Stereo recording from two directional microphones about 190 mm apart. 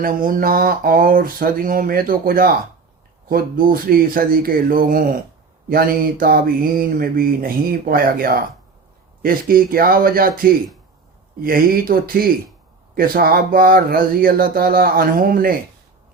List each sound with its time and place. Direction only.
0.0 s mantra: 45° right (ahead or behind)